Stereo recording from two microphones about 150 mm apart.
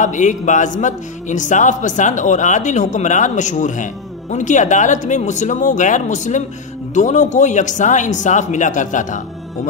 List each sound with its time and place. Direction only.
0.0 s a man's voice: 55° left (ahead or behind)